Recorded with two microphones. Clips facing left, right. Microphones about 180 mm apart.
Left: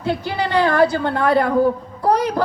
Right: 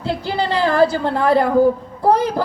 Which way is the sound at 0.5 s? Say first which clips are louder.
Even; 30° right (ahead or behind).